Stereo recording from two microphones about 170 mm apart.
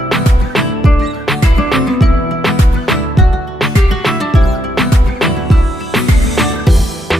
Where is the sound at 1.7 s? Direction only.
Centre (ahead or behind).